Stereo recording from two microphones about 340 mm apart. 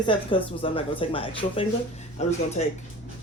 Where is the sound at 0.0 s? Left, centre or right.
Centre.